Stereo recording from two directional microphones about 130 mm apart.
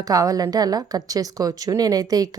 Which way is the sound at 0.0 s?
30° right (ahead or behind).